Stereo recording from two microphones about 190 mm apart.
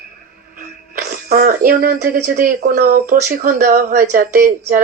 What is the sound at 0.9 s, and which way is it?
Speech, 55° right (ahead or behind).